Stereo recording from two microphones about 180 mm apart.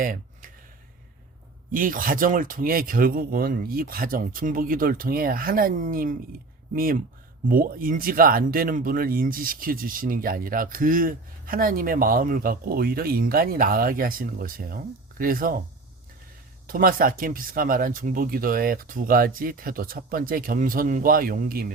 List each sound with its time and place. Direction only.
0.0 s a sound: 50° right (ahead or behind)
1.7 s speech: 50° right (ahead or behind)
16.6 s speech: 50° right (ahead or behind)